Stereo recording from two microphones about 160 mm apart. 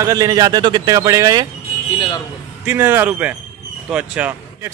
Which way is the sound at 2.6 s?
15° right (ahead or behind).